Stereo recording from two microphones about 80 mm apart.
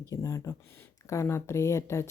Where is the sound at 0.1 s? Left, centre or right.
Left.